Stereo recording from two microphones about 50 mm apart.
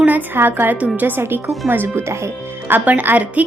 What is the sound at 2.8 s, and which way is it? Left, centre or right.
Speech, right.